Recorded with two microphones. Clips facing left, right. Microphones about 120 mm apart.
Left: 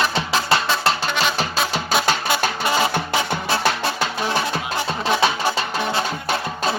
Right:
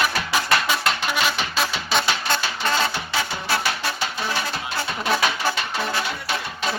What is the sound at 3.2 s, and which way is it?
Music, 20° left (ahead or behind).